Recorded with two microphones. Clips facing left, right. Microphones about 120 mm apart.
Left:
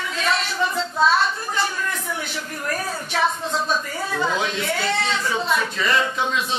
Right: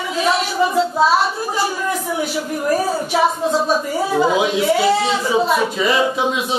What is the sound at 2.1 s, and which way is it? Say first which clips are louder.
Speech: right 9 dB; 10° right (ahead or behind).